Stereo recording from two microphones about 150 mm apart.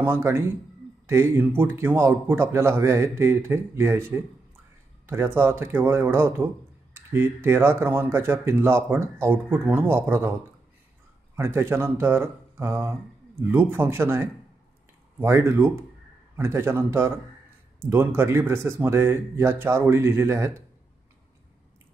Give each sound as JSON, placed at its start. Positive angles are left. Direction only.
{"t": 0.0, "sound": "a man's voice", "side_deg": -15}
{"t": 5.0, "sound": "a man's voice", "side_deg": -15}
{"t": 11.3, "sound": "a man's voice", "side_deg": -15}